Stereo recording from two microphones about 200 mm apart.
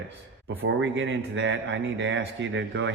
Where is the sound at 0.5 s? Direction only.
70° right (ahead or behind).